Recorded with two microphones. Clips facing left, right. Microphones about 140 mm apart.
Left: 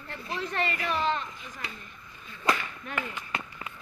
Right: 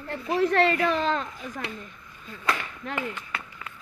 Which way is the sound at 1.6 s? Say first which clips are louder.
Right 3 dB; 65° right (ahead or behind).